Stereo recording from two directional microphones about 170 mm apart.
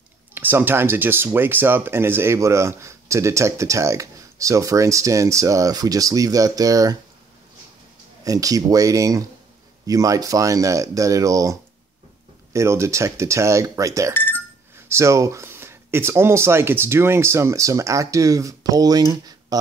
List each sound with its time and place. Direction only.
0.3 s speech: 10° right (ahead or behind)
8.2 s speech: 20° right (ahead or behind)
12.5 s speech: 15° right (ahead or behind)
14.1 s chink: 10° left (ahead or behind)
14.9 s speech: 15° right (ahead or behind)
19.5 s a sound: 20° right (ahead or behind)